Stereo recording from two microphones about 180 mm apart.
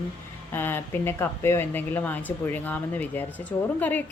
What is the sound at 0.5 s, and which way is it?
Speech, 10° left (ahead or behind).